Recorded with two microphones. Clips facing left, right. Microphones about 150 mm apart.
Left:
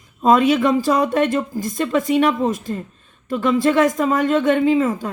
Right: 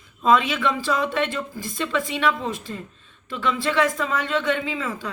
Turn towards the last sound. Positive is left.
turn(degrees=45)  # may be behind; listen again after turning